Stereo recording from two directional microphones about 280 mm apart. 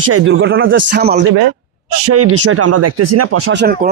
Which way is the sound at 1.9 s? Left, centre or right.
Right.